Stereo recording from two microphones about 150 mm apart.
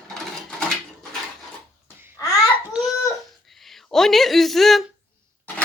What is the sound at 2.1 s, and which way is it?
Babbling, 20° left (ahead or behind).